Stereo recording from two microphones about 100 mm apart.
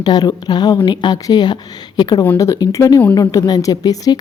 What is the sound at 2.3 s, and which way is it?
Speech, 35° left (ahead or behind).